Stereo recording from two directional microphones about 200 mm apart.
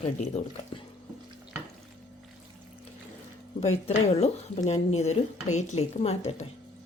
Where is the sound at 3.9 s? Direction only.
30° left (ahead or behind).